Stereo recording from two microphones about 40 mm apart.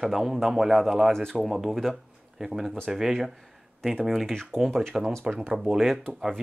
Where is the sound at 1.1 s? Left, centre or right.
Centre.